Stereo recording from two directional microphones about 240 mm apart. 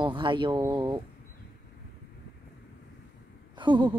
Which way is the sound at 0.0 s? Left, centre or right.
Centre.